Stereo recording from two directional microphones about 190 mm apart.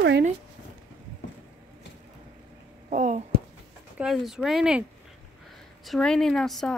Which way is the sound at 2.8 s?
40° right (ahead or behind).